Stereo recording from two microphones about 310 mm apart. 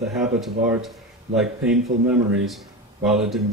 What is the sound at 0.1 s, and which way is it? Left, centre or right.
Speech, centre.